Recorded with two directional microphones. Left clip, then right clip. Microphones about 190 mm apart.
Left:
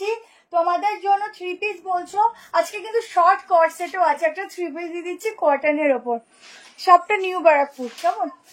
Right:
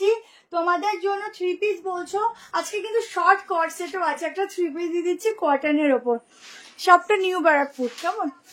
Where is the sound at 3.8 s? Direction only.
15° right (ahead or behind).